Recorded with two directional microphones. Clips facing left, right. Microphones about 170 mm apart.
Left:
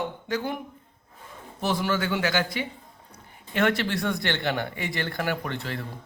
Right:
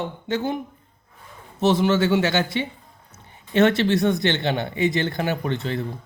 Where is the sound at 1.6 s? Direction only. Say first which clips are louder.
Right 8 dB; 25° right (ahead or behind).